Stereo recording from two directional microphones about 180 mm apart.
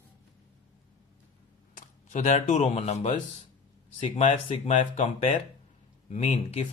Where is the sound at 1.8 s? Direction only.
45° left (ahead or behind).